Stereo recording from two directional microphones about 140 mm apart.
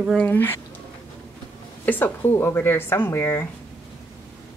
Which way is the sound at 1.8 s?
15° left (ahead or behind).